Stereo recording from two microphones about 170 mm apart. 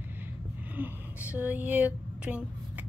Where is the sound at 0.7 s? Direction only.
10° right (ahead or behind).